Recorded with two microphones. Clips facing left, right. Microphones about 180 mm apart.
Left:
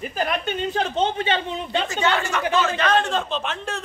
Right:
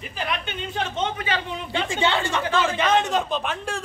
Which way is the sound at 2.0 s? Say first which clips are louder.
Right 1 dB; 25° right (ahead or behind).